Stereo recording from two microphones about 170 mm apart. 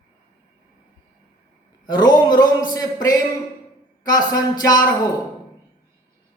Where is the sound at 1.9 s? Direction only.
25° left (ahead or behind).